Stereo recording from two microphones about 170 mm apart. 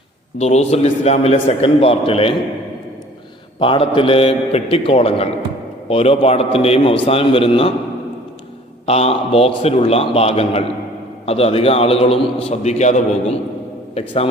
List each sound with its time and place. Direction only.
0.3 s a man's voice: 40° left (ahead or behind)
3.6 s a man's voice: 30° left (ahead or behind)
8.9 s a man's voice: 35° left (ahead or behind)